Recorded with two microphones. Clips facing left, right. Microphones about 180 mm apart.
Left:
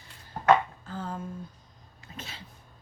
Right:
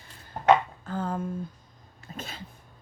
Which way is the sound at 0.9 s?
55° right (ahead or behind).